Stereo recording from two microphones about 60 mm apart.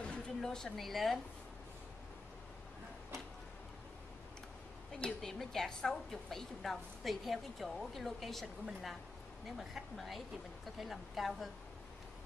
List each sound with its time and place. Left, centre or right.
0.0 s a woman's voice: centre
5.2 s a woman's voice: centre
9.6 s a woman's voice: centre